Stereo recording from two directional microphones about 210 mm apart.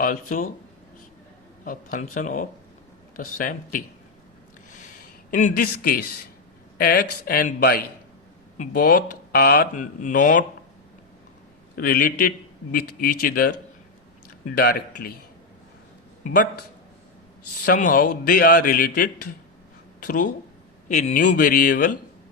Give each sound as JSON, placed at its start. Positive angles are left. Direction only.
{"t": 0.0, "sound": "speech", "side_deg": 40}
{"t": 1.6, "sound": "speech", "side_deg": 40}
{"t": 5.3, "sound": "a man's voice", "side_deg": 40}
{"t": 11.8, "sound": "a man's voice", "side_deg": 40}
{"t": 14.5, "sound": "a man's voice", "side_deg": 45}
{"t": 17.7, "sound": "a man's voice", "side_deg": 40}